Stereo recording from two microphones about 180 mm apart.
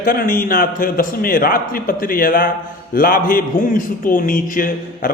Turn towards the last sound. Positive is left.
turn(degrees=50)  # may be behind; listen again after turning